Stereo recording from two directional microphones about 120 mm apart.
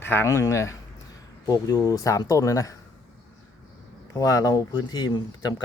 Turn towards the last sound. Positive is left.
turn(degrees=35)  # may be behind; listen again after turning